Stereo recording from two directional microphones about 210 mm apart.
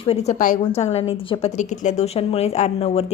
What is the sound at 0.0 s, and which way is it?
A woman's voice, 30° left (ahead or behind).